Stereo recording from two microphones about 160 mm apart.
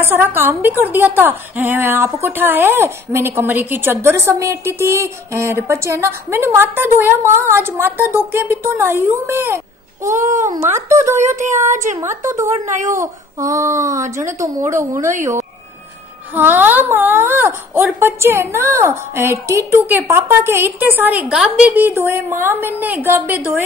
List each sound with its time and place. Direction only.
0.0 s a woman's voice: 15° right (ahead or behind)
10.1 s a child's voice: 50° right (ahead or behind)
10.9 s a woman's voice: 15° right (ahead or behind)
11.4 s a child's voice: 50° right (ahead or behind)
12.0 s a woman's voice: 15° right (ahead or behind)
16.3 s a woman's voice: 10° right (ahead or behind)